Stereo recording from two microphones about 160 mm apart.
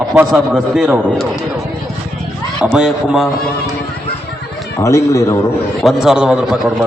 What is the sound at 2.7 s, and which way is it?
Speech, 5° right (ahead or behind).